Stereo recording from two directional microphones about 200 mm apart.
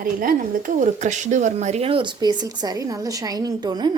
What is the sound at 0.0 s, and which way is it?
A woman's voice, 45° right (ahead or behind).